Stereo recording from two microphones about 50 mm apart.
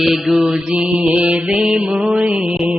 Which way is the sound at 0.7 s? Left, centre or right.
Right.